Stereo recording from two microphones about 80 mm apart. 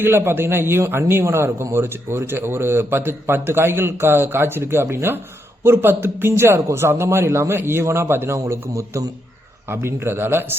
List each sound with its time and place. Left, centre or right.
0.0 s a man's voice: right